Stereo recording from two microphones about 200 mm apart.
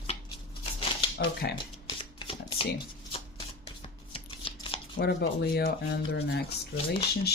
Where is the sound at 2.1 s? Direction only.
25° left (ahead or behind).